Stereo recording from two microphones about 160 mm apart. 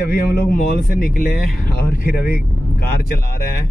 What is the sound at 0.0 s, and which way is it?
Speech, 75° left (ahead or behind).